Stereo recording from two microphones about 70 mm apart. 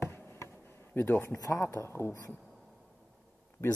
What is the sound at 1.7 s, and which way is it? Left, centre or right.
Speech, left.